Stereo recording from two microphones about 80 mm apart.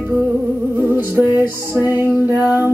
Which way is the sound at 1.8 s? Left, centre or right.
Right.